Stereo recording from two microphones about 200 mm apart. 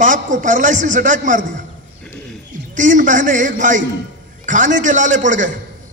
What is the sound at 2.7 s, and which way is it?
A man's voice, 40° right (ahead or behind).